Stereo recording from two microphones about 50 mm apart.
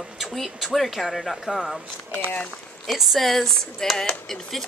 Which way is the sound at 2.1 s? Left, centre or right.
Left.